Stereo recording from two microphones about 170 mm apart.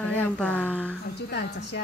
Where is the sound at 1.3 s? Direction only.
75° left (ahead or behind).